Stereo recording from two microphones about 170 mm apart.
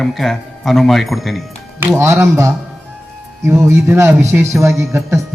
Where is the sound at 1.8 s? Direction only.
15° right (ahead or behind).